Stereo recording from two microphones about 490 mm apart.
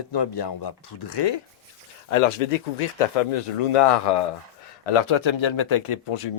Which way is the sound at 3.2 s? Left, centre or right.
Left.